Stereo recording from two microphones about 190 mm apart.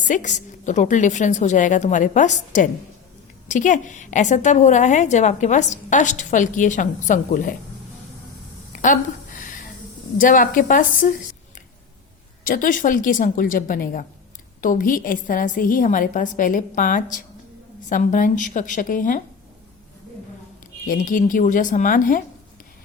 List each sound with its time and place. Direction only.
0.0 s a woman's voice: 40° left (ahead or behind)
8.8 s a sound: 45° left (ahead or behind)
10.2 s a woman's voice: 45° left (ahead or behind)
12.5 s a woman's voice: 45° left (ahead or behind)
20.8 s a woman's voice: 45° left (ahead or behind)